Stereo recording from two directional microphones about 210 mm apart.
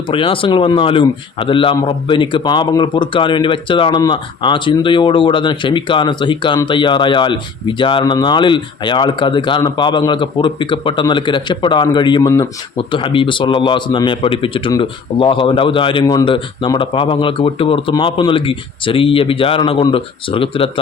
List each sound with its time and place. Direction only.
0.1 s a man's voice: 25° left (ahead or behind)